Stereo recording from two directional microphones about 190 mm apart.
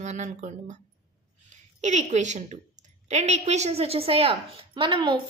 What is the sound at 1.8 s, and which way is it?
A woman's voice, 40° right (ahead or behind).